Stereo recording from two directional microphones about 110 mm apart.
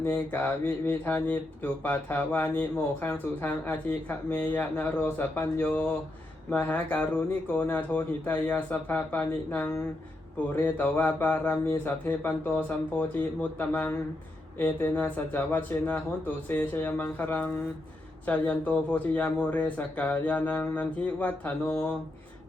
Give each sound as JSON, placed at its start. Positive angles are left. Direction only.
{"t": 0.0, "sound": "speech", "side_deg": 15}